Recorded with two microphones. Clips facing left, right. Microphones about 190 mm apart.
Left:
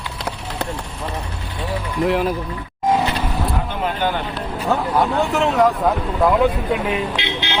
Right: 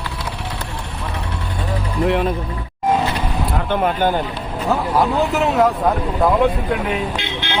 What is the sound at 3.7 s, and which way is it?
Speech, 50° right (ahead or behind).